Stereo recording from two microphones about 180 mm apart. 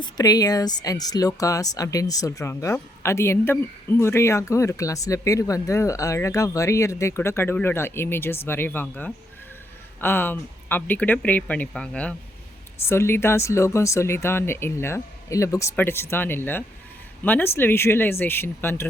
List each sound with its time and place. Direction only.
0.0 s speech: 20° left (ahead or behind)